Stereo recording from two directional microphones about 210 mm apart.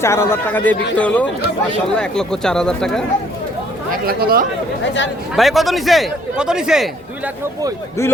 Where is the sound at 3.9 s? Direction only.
45° right (ahead or behind).